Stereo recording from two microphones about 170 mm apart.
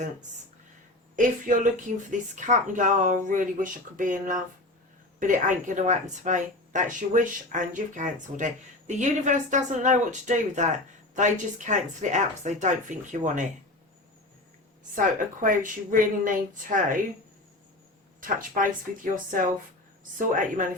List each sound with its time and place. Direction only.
1.1 s speech: 50° right (ahead or behind)
14.9 s speech: 50° right (ahead or behind)
18.2 s speech: 50° right (ahead or behind)